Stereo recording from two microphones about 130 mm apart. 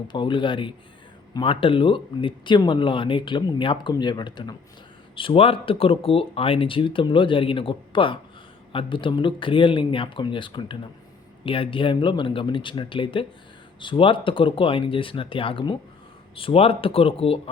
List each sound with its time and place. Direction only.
0.1 s speech: 40° left (ahead or behind)